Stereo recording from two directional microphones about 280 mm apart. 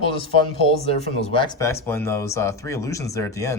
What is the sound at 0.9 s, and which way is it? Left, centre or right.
Speech, centre.